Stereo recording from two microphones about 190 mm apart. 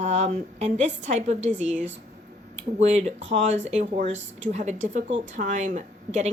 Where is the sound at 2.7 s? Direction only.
35° right (ahead or behind).